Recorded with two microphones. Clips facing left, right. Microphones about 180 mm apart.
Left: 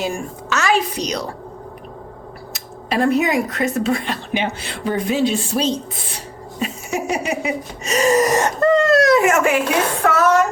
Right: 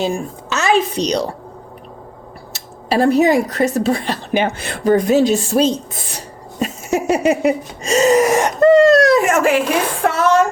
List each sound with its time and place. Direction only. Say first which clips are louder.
0.5 s a woman's voice: right 3 dB; 20° right (ahead or behind)
2.9 s speech: right 4 dB; 35° right (ahead or behind)
6.9 s a sound: right 7 dB; centre (ahead or behind)
7.9 s music: right 4 dB; 25° right (ahead or behind)
8.1 s wheeze: right 3 dB; 10° right (ahead or behind)
8.7 s speech: right 4 dB; 30° right (ahead or behind)
10.1 s music: right 1 dB; 30° right (ahead or behind)